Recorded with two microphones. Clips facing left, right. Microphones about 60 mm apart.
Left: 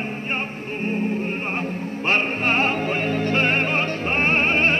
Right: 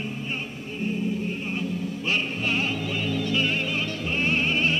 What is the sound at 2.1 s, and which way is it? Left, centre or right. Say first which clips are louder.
Music: left 6 dB; left.